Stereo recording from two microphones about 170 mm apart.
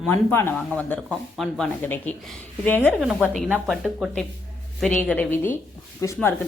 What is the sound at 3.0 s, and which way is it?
A woman's voice, 5° right (ahead or behind).